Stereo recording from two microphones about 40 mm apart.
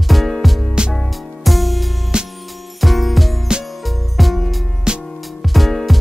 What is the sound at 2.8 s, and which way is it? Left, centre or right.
Music, centre.